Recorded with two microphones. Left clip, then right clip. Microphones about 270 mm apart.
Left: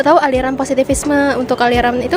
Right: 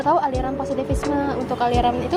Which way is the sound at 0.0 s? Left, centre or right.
Left.